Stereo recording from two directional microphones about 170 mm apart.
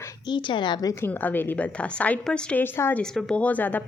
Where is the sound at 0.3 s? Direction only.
30° left (ahead or behind).